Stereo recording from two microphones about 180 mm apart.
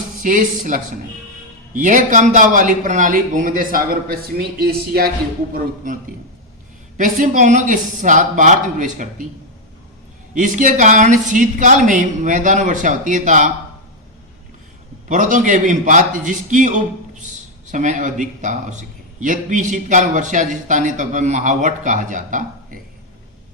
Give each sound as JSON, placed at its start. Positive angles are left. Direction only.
{"t": 0.2, "sound": "a man's voice", "side_deg": -45}
{"t": 6.9, "sound": "a man's voice", "side_deg": -45}
{"t": 10.3, "sound": "a man's voice", "side_deg": -45}
{"t": 15.1, "sound": "a man's voice", "side_deg": -45}